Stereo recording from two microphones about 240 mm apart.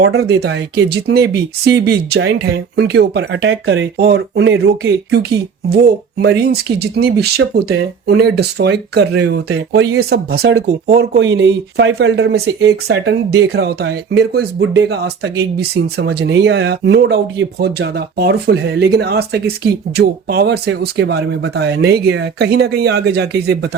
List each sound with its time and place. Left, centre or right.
0.0 s speech: right